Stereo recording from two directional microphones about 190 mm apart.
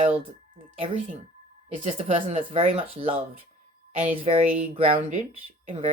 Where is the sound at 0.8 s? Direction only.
30° right (ahead or behind).